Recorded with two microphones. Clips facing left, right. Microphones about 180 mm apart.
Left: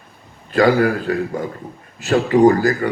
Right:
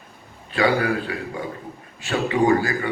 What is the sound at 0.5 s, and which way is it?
A man's voice, 45° left (ahead or behind).